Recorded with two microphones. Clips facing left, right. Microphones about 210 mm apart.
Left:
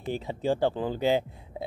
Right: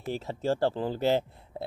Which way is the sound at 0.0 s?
Centre (ahead or behind).